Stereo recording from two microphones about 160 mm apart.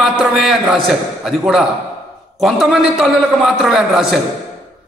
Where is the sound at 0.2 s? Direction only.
5° right (ahead or behind).